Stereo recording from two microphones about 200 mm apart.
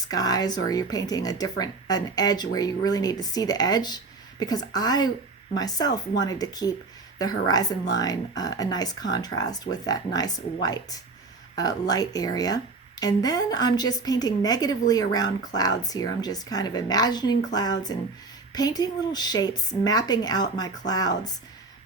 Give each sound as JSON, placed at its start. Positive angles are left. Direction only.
{"t": 0.1, "sound": "speech", "side_deg": 20}